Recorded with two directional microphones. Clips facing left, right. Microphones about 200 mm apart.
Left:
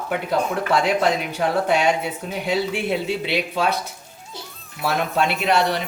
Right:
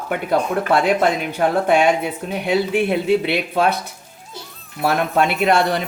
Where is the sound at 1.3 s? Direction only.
55° right (ahead or behind).